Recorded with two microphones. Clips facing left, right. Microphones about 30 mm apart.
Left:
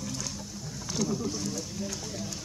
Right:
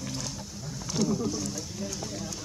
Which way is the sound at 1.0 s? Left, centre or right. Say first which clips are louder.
Right 2 dB; centre.